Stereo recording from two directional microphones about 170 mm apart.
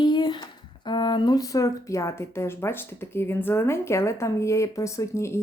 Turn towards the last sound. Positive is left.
turn(degrees=15)  # may be behind; listen again after turning